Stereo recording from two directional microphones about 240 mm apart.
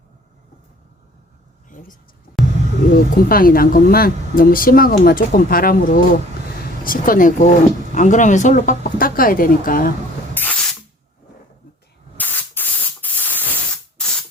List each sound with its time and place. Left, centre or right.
2.9 s speech: left
10.3 s spray: centre
12.1 s spray: centre